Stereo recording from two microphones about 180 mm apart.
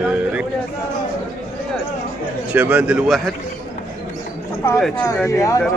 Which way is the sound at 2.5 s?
10° right (ahead or behind).